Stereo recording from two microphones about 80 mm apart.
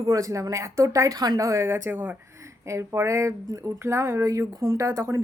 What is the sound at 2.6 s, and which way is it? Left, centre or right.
Speech, right.